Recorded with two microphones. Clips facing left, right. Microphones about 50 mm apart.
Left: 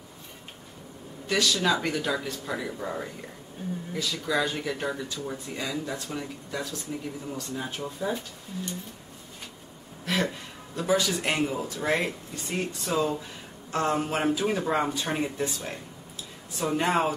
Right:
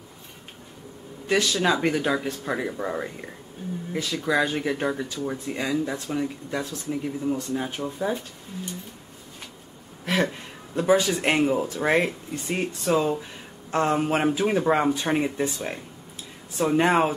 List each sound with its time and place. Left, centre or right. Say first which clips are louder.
1.2 s speech: right 3 dB; right
10.0 s speech: right 3 dB; right
16.8 s speech: right 3 dB; right